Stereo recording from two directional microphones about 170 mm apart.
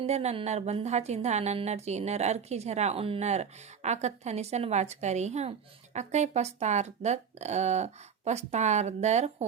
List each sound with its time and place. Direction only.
0.0 s a woman's voice: 40° right (ahead or behind)